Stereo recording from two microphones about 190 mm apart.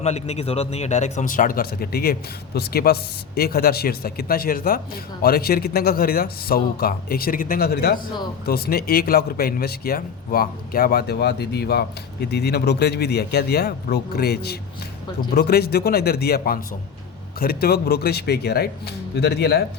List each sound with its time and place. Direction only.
0.0 s speech: 35° left (ahead or behind); by 19.6 s 55° left (ahead or behind)